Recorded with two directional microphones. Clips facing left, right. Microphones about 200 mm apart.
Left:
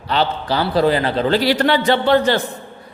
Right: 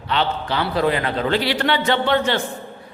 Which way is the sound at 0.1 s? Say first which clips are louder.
Left 3 dB; 35° left (ahead or behind).